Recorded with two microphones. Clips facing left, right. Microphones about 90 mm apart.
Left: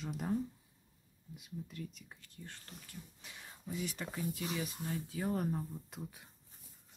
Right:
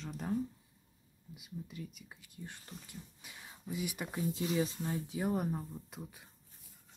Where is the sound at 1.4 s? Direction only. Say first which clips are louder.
Even; 5° right (ahead or behind).